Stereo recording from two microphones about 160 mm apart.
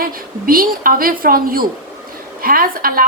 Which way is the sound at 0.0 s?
65° right (ahead or behind).